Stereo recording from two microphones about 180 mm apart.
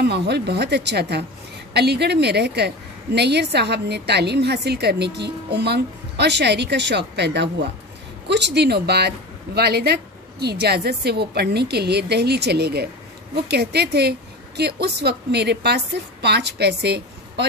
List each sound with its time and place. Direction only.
0.0 s a woman's voice: 65° right (ahead or behind)